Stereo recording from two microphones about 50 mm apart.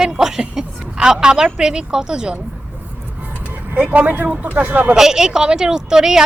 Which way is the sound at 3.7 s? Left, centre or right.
Right.